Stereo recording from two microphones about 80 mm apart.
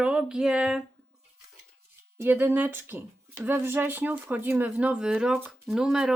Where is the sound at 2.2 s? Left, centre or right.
Right.